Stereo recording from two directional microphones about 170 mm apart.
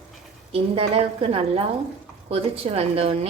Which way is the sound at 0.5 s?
35° right (ahead or behind).